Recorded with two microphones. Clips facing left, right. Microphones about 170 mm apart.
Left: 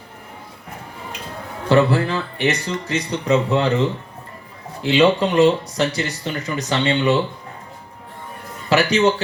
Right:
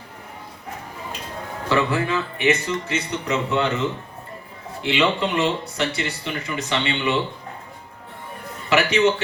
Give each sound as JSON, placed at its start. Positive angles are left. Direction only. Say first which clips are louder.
{"t": 1.7, "sound": "speech", "louder": "left 5 dB", "side_deg": 35}
{"t": 4.8, "sound": "speech", "louder": "left 6 dB", "side_deg": 35}
{"t": 8.7, "sound": "speech", "louder": "left 2 dB", "side_deg": 35}